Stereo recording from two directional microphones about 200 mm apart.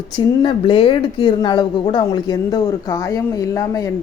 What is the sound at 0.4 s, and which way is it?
Speech, 25° left (ahead or behind).